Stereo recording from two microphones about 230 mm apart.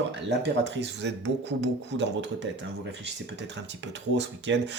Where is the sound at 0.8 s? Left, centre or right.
Right.